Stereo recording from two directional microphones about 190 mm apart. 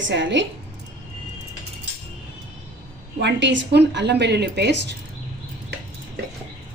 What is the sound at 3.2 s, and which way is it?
A woman's voice, 65° right (ahead or behind).